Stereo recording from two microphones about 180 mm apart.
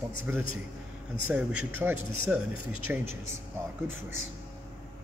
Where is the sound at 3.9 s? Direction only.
90° right.